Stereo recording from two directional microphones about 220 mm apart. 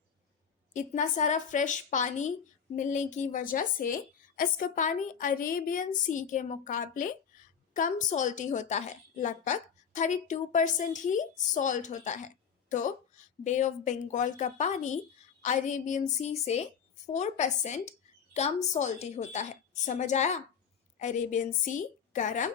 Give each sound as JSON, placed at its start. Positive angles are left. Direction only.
{"t": 0.7, "sound": "a woman's voice", "side_deg": 35}